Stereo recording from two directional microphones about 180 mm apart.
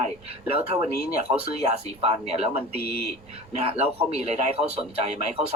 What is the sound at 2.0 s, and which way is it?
Speech, 35° right (ahead or behind).